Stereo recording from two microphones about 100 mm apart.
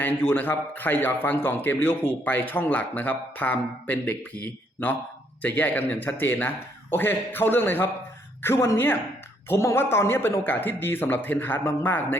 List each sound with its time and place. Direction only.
0.0 s a man's voice: 20° left (ahead or behind)